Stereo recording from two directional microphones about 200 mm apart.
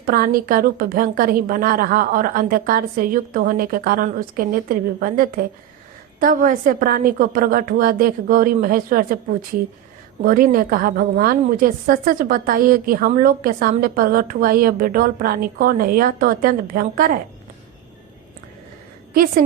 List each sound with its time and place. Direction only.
0.0 s a woman's voice: 45° right (ahead or behind)
10.2 s a woman's voice: 45° right (ahead or behind)